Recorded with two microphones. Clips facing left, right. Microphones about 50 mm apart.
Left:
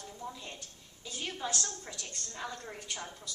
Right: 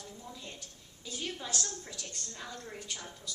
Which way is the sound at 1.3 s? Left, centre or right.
Centre.